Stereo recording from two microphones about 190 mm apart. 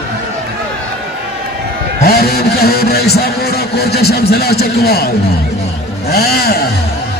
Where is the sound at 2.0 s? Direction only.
55° left (ahead or behind).